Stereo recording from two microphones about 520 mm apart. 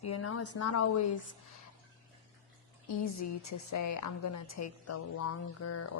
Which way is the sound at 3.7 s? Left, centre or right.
Left.